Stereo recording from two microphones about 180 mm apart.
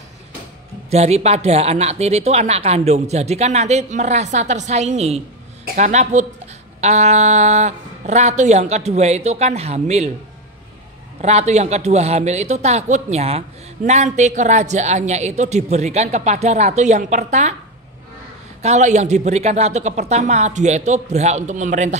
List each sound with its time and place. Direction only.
0.8 s a woman's voice: 35° right (ahead or behind)
11.1 s a woman's voice: 40° right (ahead or behind)
18.6 s a woman's voice: 40° right (ahead or behind)